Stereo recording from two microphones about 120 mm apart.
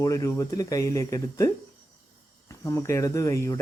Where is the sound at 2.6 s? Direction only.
25° left (ahead or behind).